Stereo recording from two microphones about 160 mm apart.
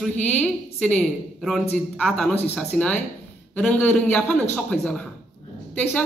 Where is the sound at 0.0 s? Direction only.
5° left (ahead or behind).